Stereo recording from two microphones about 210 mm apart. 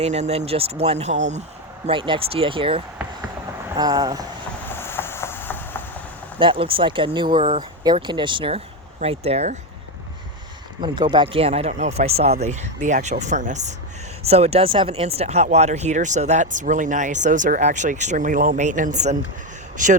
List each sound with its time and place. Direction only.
0.0 s speech: 30° right (ahead or behind)
1.9 s speech: 25° right (ahead or behind)
4.7 s a sound: 10° left (ahead or behind)
6.4 s speech: 25° right (ahead or behind)
10.8 s speech: 20° right (ahead or behind); by 20.0 s 40° right (ahead or behind)